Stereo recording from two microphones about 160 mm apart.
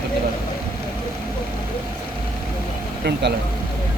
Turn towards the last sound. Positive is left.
turn(degrees=-90)